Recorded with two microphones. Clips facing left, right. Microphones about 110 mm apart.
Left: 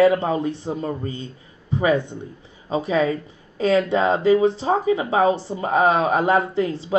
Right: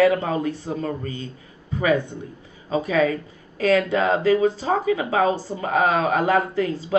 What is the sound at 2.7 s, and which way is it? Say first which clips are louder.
Speech: even; 25° left (ahead or behind).